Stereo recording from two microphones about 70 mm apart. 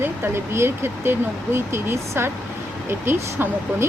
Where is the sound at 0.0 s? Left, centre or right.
Right.